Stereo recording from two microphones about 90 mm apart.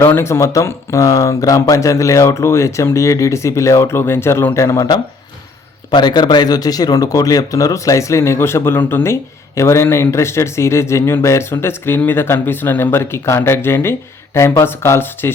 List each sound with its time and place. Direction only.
0.0 s speech: 30° left (ahead or behind)
5.9 s speech: 50° left (ahead or behind); by 15.3 s 25° left (ahead or behind)